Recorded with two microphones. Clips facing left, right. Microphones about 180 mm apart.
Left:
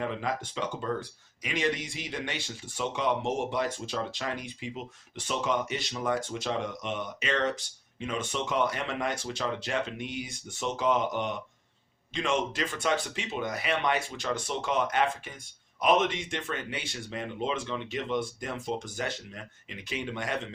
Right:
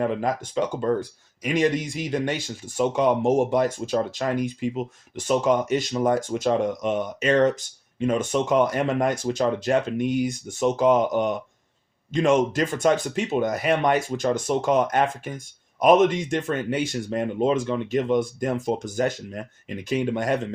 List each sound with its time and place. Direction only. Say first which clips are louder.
0.0 s speech: right 8 dB; 45° right (ahead or behind)